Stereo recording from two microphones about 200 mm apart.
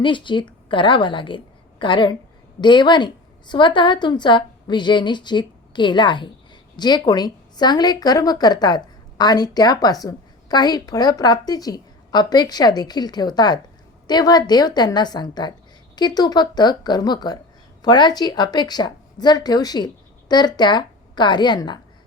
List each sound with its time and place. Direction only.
0.0 s a woman's voice: 25° left (ahead or behind)